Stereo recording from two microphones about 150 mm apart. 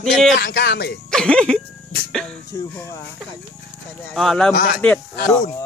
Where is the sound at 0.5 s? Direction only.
90° left.